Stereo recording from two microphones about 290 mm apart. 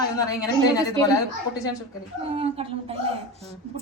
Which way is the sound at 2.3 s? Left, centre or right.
Centre.